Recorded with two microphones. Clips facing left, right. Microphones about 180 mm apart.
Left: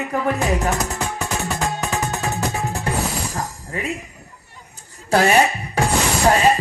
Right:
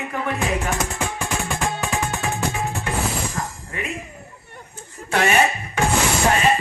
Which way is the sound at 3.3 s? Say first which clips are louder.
Left 2 dB; 35° left (ahead or behind).